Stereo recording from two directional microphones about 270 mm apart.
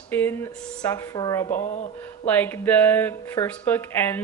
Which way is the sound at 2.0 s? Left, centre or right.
Centre.